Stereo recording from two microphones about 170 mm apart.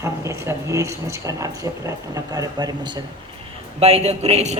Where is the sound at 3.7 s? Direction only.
35° right (ahead or behind).